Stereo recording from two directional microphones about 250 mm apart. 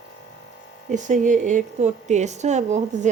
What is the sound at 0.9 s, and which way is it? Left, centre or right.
A woman's voice, right.